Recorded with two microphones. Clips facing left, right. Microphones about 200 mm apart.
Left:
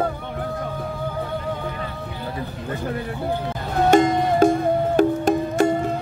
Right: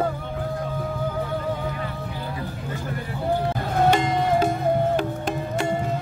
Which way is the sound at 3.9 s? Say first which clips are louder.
Left 7 dB; 45° left (ahead or behind).